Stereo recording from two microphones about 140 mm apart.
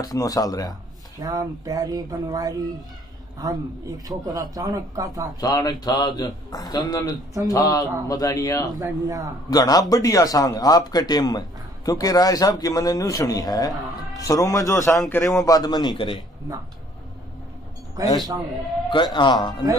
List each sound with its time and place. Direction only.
0.0 s a man's voice: 25° left (ahead or behind)
1.2 s speech: 25° right (ahead or behind)
5.4 s a man's voice: 30° left (ahead or behind)
8.7 s speech: 25° right (ahead or behind)
9.5 s a man's voice: 25° left (ahead or behind)
15.4 s a man's voice: 25° left (ahead or behind)
18.0 s speech: 25° right (ahead or behind)
18.9 s speech: 35° left (ahead or behind)